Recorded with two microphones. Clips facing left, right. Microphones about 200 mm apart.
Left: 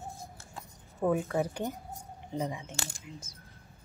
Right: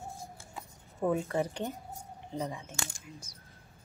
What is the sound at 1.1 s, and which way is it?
A woman's voice, 5° left (ahead or behind).